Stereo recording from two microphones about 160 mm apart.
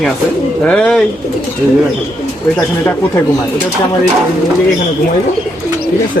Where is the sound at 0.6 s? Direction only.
5° left (ahead or behind).